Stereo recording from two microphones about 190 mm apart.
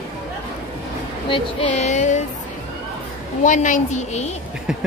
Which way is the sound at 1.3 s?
35° left (ahead or behind).